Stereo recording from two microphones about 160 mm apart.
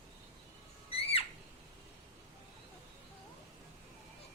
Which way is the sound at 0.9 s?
35° left (ahead or behind).